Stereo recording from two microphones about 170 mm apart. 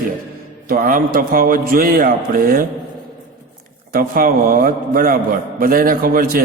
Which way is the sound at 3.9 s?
55° right (ahead or behind).